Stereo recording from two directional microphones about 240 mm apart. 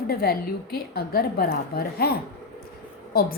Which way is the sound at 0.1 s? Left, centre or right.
Left.